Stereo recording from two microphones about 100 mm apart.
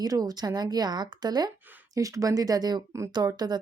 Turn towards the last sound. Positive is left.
turn(degrees=-40)  # may be behind; listen again after turning